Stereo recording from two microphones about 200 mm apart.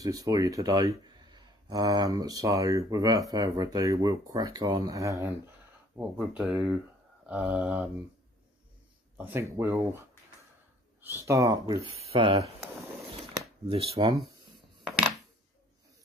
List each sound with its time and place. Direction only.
0.0 s speech: 20° right (ahead or behind)
5.9 s speech: centre (ahead or behind)
9.1 s speech: 10° right (ahead or behind)
11.1 s speech: 15° right (ahead or behind)
12.1 s speech: 25° right (ahead or behind)